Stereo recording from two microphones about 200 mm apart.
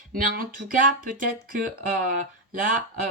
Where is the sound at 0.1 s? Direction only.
45° right (ahead or behind).